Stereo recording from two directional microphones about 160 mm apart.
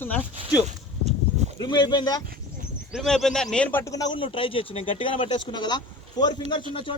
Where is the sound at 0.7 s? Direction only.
45° right (ahead or behind).